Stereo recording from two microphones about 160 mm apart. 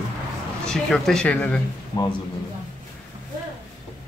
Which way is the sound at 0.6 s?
5° left (ahead or behind).